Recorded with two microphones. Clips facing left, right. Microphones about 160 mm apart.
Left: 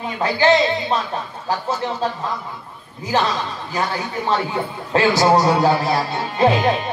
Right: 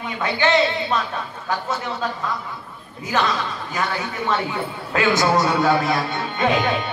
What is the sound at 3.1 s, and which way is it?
A man's voice, 30° left (ahead or behind).